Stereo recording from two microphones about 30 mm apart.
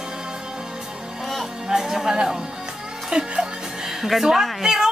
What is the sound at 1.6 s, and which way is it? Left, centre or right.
Speech, centre.